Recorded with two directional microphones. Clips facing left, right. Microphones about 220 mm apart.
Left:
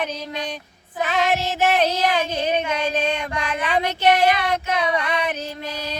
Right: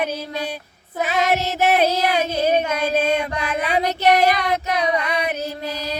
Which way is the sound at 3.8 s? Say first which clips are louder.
Right 1 dB; 40° right (ahead or behind).